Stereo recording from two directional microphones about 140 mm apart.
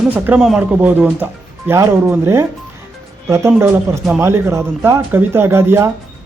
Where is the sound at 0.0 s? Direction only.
10° right (ahead or behind).